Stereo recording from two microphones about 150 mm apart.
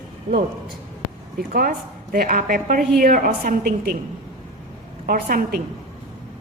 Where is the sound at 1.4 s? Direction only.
80° right.